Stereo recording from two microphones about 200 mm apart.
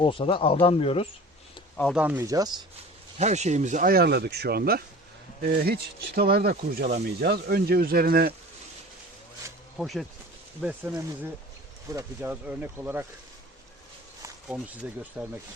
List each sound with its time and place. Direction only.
0.0 s speech: 25° left (ahead or behind)
1.7 s speech: 5° left (ahead or behind)
2.0 s speech: 10° right (ahead or behind)
3.2 s speech: 35° right (ahead or behind)
6.1 s speech: 50° right (ahead or behind)
9.7 s speech: centre (ahead or behind)
14.4 s speech: 5° right (ahead or behind)